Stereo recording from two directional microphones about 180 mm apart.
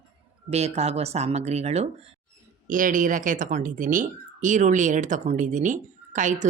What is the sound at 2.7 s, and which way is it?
Speech, 50° right (ahead or behind).